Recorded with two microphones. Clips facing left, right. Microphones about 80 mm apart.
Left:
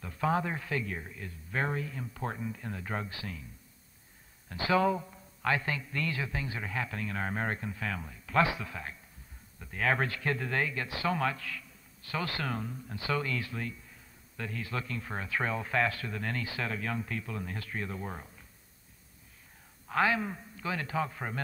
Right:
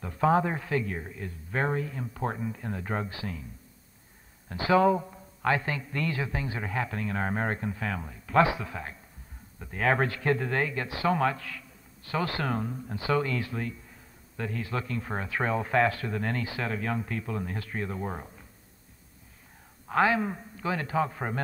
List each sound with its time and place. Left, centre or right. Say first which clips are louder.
0.0 s a man's voice: right 6 dB; right
4.5 s a man's voice: right 5 dB; right
19.9 s a man's voice: right 4 dB; right